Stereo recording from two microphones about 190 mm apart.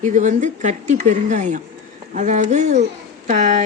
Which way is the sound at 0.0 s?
40° right (ahead or behind).